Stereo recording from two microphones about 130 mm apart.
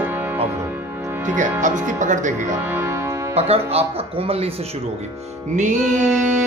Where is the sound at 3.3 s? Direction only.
50° right (ahead or behind).